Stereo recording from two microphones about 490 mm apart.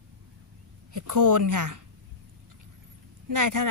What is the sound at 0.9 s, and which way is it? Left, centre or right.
Speech, right.